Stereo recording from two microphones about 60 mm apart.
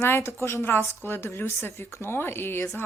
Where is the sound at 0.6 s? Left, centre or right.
Left.